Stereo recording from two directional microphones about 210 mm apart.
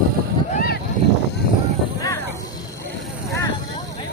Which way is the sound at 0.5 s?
45° left (ahead or behind).